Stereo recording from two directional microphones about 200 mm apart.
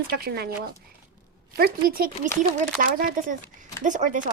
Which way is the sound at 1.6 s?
50° right (ahead or behind).